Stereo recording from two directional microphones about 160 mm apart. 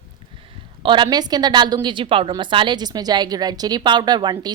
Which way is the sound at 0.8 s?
30° right (ahead or behind).